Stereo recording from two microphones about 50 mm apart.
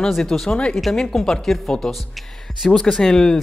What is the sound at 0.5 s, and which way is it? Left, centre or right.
Speech, left.